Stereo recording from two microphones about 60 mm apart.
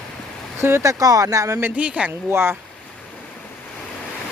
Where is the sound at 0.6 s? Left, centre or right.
Right.